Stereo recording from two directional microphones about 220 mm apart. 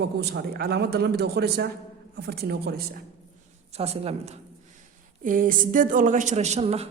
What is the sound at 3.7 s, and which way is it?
A woman's voice, 30° right (ahead or behind).